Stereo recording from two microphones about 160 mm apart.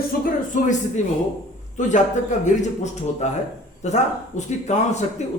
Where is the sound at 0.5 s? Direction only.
50° left (ahead or behind).